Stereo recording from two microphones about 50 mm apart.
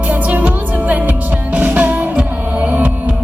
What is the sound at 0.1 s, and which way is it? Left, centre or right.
Music, right.